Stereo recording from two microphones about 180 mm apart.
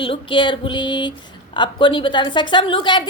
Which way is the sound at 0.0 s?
30° left (ahead or behind).